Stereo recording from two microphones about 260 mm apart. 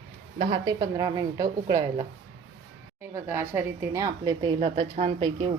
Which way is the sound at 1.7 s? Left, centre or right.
Right.